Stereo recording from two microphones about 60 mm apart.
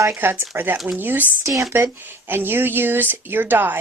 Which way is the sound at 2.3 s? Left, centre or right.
Right.